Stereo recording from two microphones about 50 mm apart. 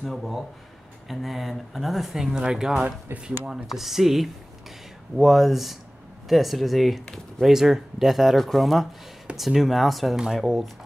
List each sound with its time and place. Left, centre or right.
0.0 s speech: centre
3.1 s speech: right
3.6 s speech: centre